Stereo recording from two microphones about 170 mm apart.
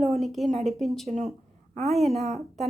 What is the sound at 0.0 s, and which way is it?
A woman's voice, centre (ahead or behind).